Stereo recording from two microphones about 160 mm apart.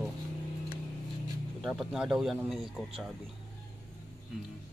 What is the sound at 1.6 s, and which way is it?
A man's voice, centre (ahead or behind).